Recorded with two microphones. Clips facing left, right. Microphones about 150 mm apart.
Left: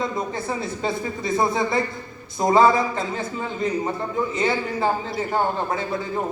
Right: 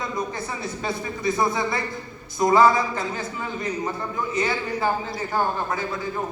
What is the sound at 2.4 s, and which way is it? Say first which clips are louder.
A man's voice: left 1 dB; 25° left (ahead or behind).